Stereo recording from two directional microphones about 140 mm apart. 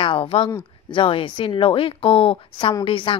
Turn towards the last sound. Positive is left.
turn(degrees=35)  # may be behind; listen again after turning